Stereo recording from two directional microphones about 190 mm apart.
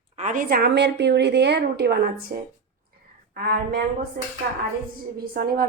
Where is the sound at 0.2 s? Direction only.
45° right (ahead or behind); by 2.0 s 60° right (ahead or behind).